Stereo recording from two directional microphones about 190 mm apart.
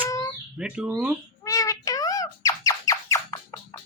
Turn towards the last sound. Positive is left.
turn(degrees=20)  # may be behind; listen again after turning